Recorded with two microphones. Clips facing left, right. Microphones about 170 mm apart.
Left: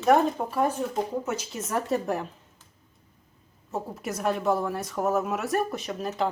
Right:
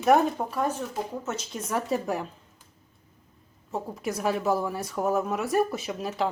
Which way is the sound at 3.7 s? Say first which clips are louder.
Right 1 dB; centre (ahead or behind).